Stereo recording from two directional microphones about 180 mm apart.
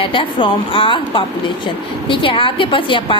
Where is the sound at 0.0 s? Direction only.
30° left (ahead or behind).